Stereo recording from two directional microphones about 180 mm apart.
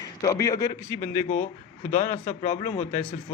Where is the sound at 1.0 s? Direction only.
50° left (ahead or behind).